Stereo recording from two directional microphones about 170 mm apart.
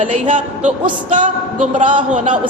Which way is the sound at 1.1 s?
45° right (ahead or behind).